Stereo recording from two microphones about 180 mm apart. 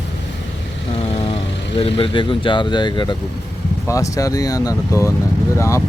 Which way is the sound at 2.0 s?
30° left (ahead or behind).